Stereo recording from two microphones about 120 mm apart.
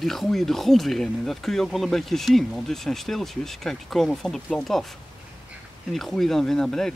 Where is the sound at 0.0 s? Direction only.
Centre (ahead or behind).